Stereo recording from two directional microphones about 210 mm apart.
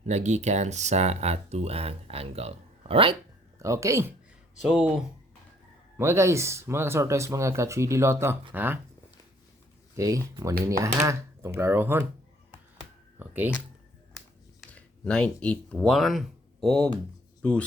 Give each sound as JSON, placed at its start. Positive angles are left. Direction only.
{"t": 0.0, "sound": "speech", "side_deg": -35}
{"t": 3.6, "sound": "speech", "side_deg": -15}
{"t": 4.6, "sound": "speech", "side_deg": 0}
{"t": 6.0, "sound": "speech", "side_deg": -10}
{"t": 9.9, "sound": "speech", "side_deg": -15}
{"t": 13.1, "sound": "a sound", "side_deg": -10}
{"t": 14.6, "sound": "speech", "side_deg": 5}